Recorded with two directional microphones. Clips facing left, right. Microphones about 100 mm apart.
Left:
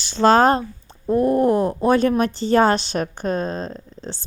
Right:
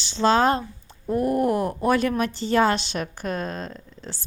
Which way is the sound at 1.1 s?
30° left (ahead or behind).